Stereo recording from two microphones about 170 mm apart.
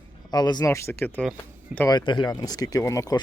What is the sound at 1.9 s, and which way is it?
Speech, 25° left (ahead or behind).